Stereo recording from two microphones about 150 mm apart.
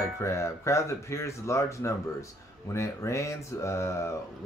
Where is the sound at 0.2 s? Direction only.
20° left (ahead or behind).